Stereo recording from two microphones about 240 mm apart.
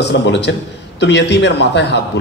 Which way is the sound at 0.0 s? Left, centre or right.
Left.